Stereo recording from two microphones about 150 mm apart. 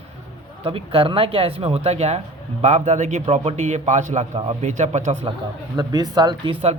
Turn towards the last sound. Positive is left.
turn(degrees=-30)  # may be behind; listen again after turning